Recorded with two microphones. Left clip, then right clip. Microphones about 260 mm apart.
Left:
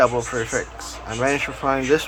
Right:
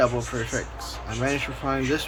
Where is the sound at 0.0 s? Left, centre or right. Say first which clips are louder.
Left 5 dB; centre.